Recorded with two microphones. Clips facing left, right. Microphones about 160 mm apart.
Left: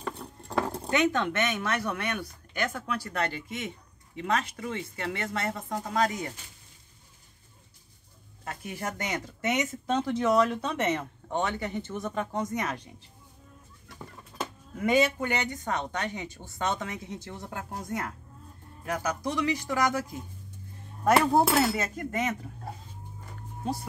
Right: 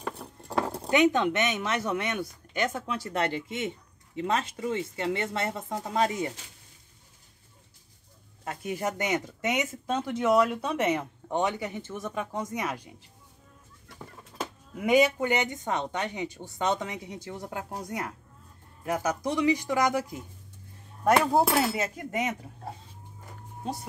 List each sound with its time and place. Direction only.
0.0 s a sound: centre (ahead or behind)
0.8 s speech: 20° right (ahead or behind)
8.5 s speech: 20° right (ahead or behind)
13.9 s speech: 10° right (ahead or behind)
21.2 s speech: 5° right (ahead or behind)